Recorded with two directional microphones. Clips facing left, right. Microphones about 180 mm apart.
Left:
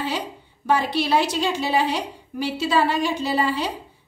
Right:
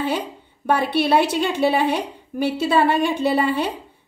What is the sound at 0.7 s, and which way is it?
A woman's voice, 55° right (ahead or behind).